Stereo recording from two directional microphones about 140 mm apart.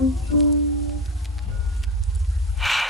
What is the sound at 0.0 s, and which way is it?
Music, centre (ahead or behind).